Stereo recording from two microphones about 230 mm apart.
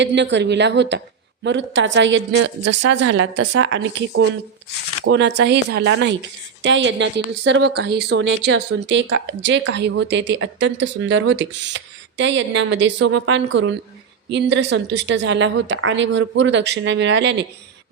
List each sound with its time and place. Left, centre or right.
0.0 s speech: right